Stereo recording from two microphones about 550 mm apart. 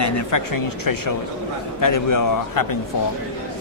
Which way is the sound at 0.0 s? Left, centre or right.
Left.